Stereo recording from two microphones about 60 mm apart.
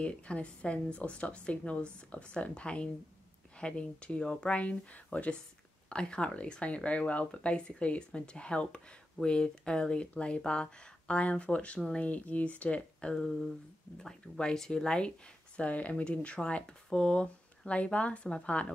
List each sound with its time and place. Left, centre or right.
0.0 s speech: centre
13.1 s a sound: centre
14.3 s speech: centre